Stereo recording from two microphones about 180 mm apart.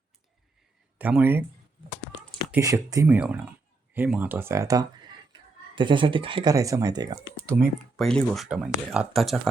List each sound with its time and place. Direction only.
0.9 s speech: 10° right (ahead or behind)
2.6 s speech: 20° right (ahead or behind)
7.9 s speech: centre (ahead or behind)